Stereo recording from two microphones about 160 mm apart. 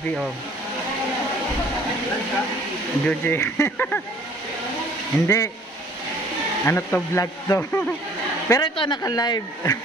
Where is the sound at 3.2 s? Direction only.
15° left (ahead or behind).